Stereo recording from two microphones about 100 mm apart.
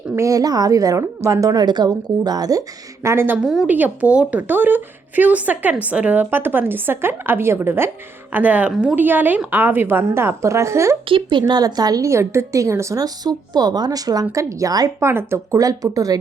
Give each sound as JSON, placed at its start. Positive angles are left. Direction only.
{"t": 0.2, "sound": "a woman's voice", "side_deg": -35}
{"t": 3.3, "sound": "a woman's voice", "side_deg": -5}
{"t": 3.7, "sound": "a woman's voice", "side_deg": -15}
{"t": 11.1, "sound": "a woman's voice", "side_deg": -50}
{"t": 15.0, "sound": "a woman's voice", "side_deg": -25}